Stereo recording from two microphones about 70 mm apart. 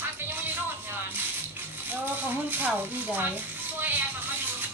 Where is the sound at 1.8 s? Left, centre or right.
Right.